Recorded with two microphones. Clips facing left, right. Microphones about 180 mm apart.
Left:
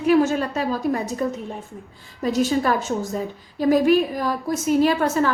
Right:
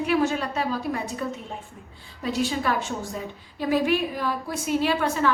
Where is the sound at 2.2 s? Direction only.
40° left (ahead or behind).